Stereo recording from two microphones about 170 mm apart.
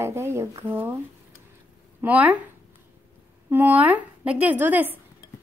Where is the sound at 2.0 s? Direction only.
10° right (ahead or behind).